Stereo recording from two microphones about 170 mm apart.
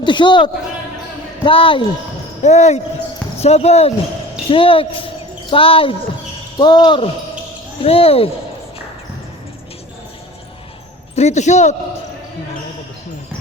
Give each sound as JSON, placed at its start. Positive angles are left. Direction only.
{"t": 0.0, "sound": "speech", "side_deg": 30}
{"t": 2.4, "sound": "speech", "side_deg": 40}
{"t": 11.1, "sound": "speech", "side_deg": 40}